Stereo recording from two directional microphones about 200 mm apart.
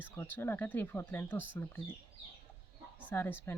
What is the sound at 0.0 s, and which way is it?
Speech, 10° left (ahead or behind).